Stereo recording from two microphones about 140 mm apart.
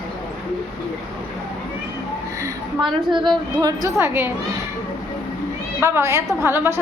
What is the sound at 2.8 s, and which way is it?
Speech, 35° right (ahead or behind).